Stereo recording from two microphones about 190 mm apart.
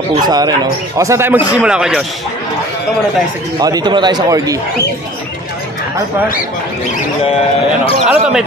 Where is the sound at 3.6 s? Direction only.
20° right (ahead or behind).